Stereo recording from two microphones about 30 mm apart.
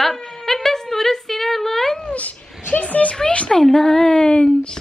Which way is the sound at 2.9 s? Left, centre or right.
Left.